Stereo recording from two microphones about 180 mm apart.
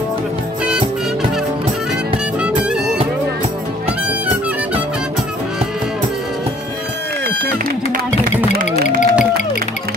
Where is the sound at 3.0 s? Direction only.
35° right (ahead or behind).